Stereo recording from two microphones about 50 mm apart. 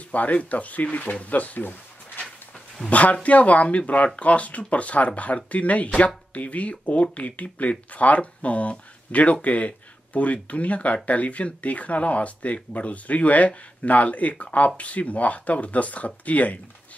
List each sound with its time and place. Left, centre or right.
0.1 s speech: left
2.9 s speech: left